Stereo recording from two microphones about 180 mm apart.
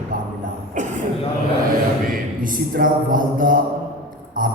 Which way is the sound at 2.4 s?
50° right (ahead or behind).